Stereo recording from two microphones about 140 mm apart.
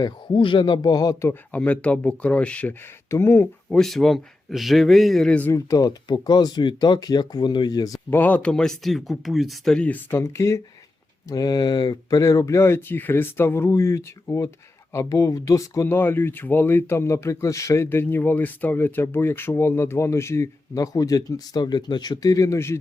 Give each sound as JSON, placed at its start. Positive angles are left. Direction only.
{"t": 0.0, "sound": "a man's voice", "side_deg": 35}
{"t": 1.3, "sound": "speech", "side_deg": 10}
{"t": 3.7, "sound": "speech", "side_deg": 5}
{"t": 5.5, "sound": "speech", "side_deg": 25}
{"t": 8.1, "sound": "speech", "side_deg": 10}